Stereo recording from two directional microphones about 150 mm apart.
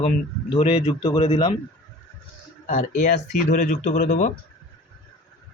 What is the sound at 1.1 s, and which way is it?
Speech, 40° left (ahead or behind).